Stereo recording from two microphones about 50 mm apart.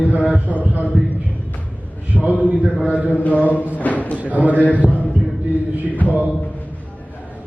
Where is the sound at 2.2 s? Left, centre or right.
Centre.